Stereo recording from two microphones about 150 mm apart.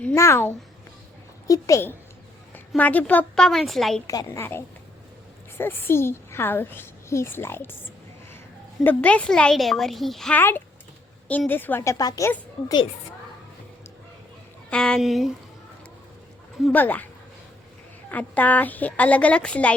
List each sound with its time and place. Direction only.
0.0 s a child's voice: 15° left (ahead or behind); by 4.0 s centre (ahead or behind)
4.0 s a woman's voice: 20° left (ahead or behind)
8.8 s a woman's voice: 10° left (ahead or behind)
14.7 s a woman's voice: 5° left (ahead or behind)
16.7 s a woman's voice: 10° left (ahead or behind)
18.1 s a woman's voice: 10° left (ahead or behind)